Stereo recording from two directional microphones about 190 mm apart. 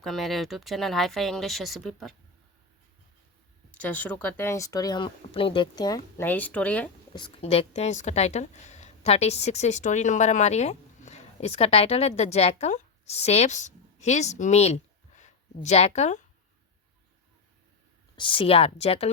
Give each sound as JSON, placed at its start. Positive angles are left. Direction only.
{"t": 0.0, "sound": "speech", "side_deg": 0}
{"t": 3.8, "sound": "speech", "side_deg": 10}
{"t": 7.1, "sound": "speech", "side_deg": 25}
{"t": 18.2, "sound": "speech", "side_deg": 25}